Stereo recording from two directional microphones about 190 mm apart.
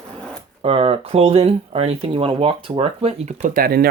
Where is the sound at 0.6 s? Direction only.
30° right (ahead or behind).